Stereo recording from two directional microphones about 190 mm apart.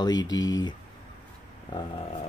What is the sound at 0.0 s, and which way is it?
Speech, 20° left (ahead or behind).